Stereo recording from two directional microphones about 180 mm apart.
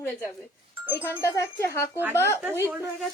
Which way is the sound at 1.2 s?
15° left (ahead or behind).